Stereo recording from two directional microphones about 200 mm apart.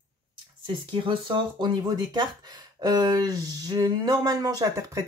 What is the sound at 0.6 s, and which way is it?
Speech, 25° right (ahead or behind).